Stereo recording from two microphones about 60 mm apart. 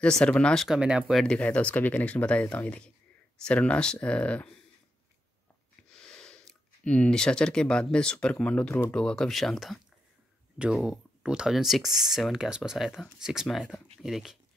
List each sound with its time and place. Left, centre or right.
0.0 s speech: centre
0.7 s speech: centre
1.3 s speech: left
5.9 s speech: centre